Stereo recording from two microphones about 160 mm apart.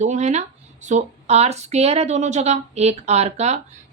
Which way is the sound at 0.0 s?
45° right (ahead or behind).